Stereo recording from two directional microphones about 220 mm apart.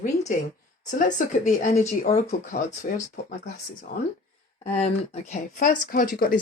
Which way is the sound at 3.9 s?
40° left (ahead or behind).